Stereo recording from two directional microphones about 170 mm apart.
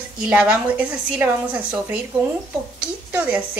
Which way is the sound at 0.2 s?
5° right (ahead or behind).